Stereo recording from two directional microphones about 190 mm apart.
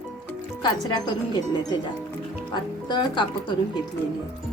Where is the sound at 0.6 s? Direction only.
25° left (ahead or behind).